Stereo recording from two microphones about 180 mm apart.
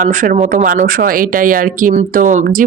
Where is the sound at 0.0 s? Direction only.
45° right (ahead or behind).